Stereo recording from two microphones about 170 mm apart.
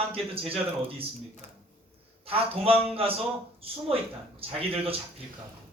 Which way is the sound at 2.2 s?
35° right (ahead or behind).